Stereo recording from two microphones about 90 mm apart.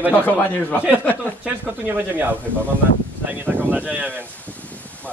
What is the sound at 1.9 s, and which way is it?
Speech, 20° right (ahead or behind).